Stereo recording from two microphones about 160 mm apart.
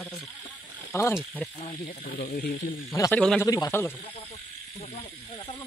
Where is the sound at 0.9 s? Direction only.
15° left (ahead or behind).